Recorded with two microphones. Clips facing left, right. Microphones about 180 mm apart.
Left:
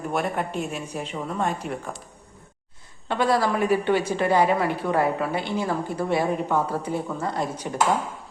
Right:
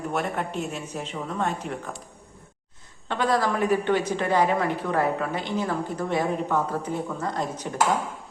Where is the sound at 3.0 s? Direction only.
10° left (ahead or behind).